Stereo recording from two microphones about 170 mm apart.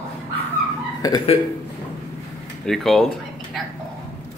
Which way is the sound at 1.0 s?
20° left (ahead or behind).